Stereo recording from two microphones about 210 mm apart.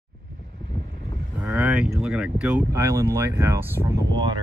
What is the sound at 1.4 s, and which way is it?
Speech, 5° right (ahead or behind).